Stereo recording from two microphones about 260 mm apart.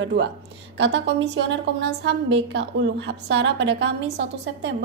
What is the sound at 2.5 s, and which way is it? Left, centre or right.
A woman's voice, right.